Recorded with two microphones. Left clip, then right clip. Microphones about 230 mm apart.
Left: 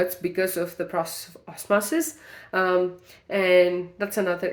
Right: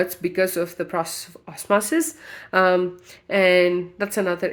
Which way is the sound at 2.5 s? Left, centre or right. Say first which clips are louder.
Right 4 dB; right.